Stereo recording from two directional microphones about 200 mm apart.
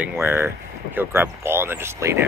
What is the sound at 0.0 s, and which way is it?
Speech, 10° right (ahead or behind).